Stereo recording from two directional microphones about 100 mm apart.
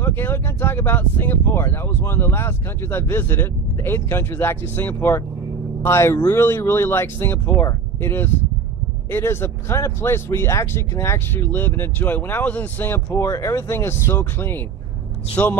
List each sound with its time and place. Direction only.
0.0 s speech: 20° left (ahead or behind)